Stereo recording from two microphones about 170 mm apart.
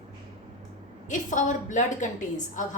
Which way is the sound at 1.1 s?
45° left (ahead or behind).